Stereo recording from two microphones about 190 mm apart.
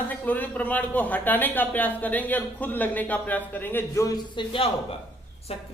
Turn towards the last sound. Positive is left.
turn(degrees=30)  # may be behind; listen again after turning